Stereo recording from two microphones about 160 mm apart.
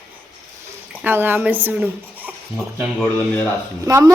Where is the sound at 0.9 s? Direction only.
10° right (ahead or behind).